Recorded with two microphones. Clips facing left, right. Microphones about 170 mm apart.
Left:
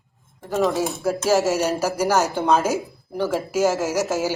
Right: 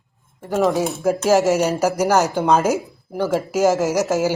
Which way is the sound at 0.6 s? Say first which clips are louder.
Right 3 dB; centre (ahead or behind).